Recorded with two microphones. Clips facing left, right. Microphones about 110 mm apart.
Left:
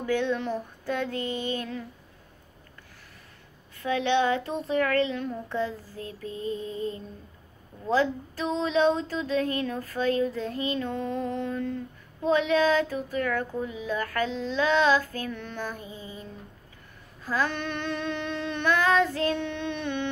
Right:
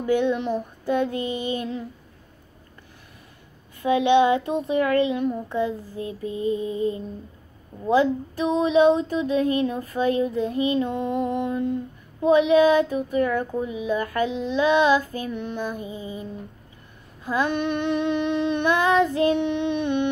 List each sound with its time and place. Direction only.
0.0 s speech: 15° right (ahead or behind)
3.8 s speech: 15° right (ahead or behind)